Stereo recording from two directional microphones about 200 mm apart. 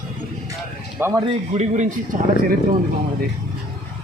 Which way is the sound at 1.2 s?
35° right (ahead or behind).